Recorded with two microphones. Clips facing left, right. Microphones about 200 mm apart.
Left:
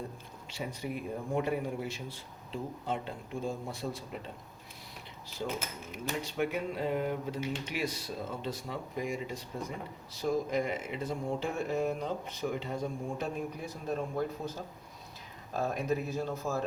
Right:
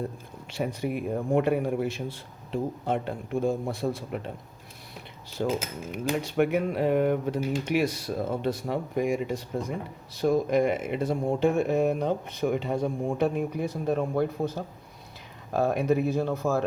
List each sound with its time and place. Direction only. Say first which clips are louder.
0.5 s speech: right 8 dB; 65° right (ahead or behind)
3.8 s speech: right 8 dB; 60° right (ahead or behind)
5.4 s speech: right 8 dB; 65° right (ahead or behind)